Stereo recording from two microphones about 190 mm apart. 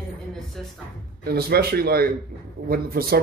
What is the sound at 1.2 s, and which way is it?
Speech, 55° right (ahead or behind).